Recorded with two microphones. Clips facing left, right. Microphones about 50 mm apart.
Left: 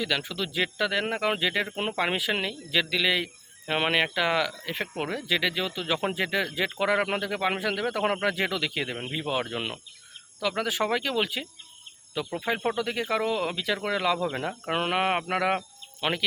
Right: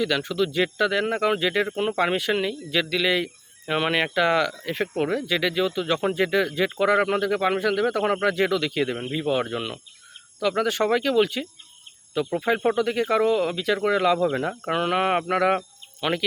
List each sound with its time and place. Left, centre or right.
0.0 s speech: centre
9.6 s speech: centre
10.4 s speech: centre
12.2 s speech: centre
12.7 s speech: centre
14.7 s speech: centre